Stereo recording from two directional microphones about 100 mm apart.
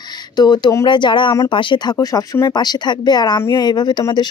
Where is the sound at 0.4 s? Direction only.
45° left (ahead or behind).